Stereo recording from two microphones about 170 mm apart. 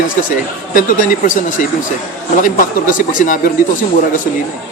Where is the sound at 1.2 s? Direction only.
50° left (ahead or behind).